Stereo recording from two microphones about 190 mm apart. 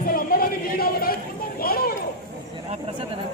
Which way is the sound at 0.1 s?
50° left (ahead or behind).